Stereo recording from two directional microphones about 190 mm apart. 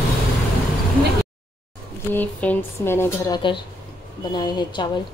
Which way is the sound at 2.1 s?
10° left (ahead or behind).